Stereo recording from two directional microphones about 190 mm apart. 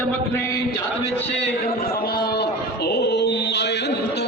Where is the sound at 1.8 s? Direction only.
50° left (ahead or behind).